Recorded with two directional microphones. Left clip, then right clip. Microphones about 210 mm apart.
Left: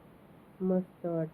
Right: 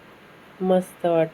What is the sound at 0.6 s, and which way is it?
Speech, 25° right (ahead or behind).